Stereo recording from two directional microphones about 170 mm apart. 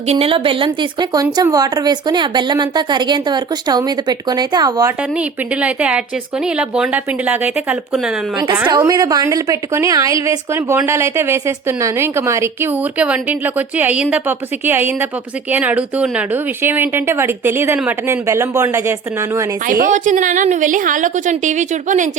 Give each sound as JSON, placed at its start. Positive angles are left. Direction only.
{"t": 0.1, "sound": "speech", "side_deg": -35}
{"t": 5.1, "sound": "a woman's voice", "side_deg": -5}
{"t": 8.9, "sound": "a woman's voice", "side_deg": -20}
{"t": 19.6, "sound": "a woman's voice", "side_deg": -55}